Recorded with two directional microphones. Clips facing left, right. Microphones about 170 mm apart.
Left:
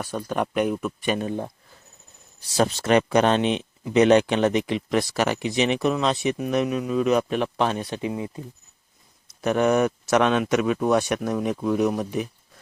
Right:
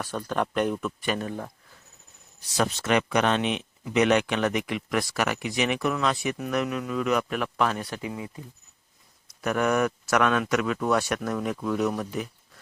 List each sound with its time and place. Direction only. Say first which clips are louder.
0.0 s speech: left 2 dB; 10° left (ahead or behind)
1.0 s speech: left 5 dB; 20° left (ahead or behind)
2.6 s speech: left 5 dB; 30° left (ahead or behind)
9.4 s speech: left 4 dB; 25° left (ahead or behind)